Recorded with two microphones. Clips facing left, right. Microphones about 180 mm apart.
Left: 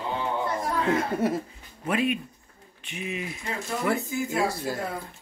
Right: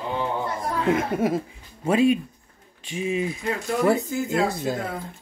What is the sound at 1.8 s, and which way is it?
Speech, 25° right (ahead or behind).